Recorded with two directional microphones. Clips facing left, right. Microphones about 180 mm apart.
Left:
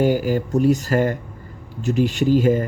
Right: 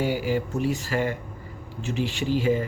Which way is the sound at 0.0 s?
45° left (ahead or behind).